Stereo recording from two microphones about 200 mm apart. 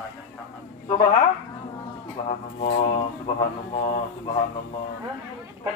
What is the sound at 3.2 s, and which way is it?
A man's voice, 30° left (ahead or behind).